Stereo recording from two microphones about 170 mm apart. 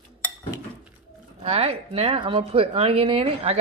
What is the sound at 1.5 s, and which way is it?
Speech, 35° right (ahead or behind).